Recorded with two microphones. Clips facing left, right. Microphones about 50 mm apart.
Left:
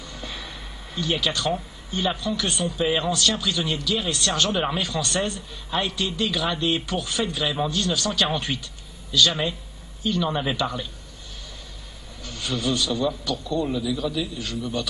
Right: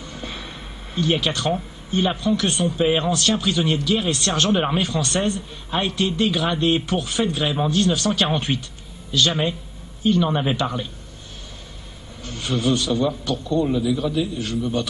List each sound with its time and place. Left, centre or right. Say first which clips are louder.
0.0 s a sound: right 3 dB; right
1.9 s a man's voice: right 5 dB; right
4.5 s a man's voice: right 4 dB; centre
12.2 s a man's voice: right 4 dB; right